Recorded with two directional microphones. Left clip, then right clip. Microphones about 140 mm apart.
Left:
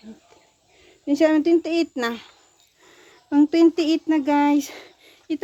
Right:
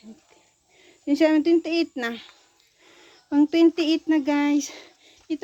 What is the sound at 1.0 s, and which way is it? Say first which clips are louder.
Speech: left 1 dB; 20° left (ahead or behind).